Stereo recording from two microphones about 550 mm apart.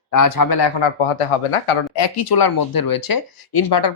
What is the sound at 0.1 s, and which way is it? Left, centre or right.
Speech, left.